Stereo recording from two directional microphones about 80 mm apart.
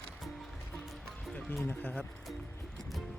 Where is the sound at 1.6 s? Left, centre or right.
Left.